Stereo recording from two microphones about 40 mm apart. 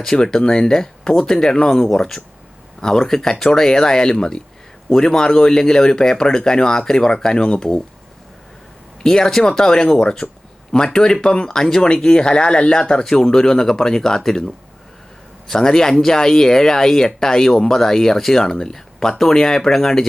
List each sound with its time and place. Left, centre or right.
0.2 s speech: centre
9.0 s speech: centre